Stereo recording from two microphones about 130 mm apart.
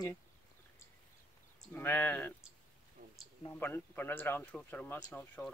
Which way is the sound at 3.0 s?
90° right.